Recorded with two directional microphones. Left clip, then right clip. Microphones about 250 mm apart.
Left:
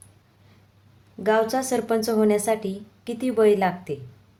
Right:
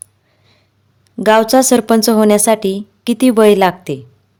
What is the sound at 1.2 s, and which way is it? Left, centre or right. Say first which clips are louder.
A woman's voice: right 12 dB; right.